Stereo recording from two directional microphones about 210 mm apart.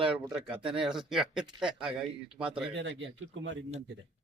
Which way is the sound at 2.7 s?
60° right (ahead or behind).